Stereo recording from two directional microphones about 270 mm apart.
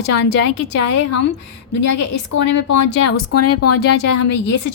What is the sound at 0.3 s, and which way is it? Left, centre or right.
Speech, left.